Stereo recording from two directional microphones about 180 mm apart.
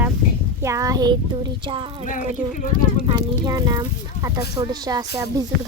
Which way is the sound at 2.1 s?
50° left (ahead or behind).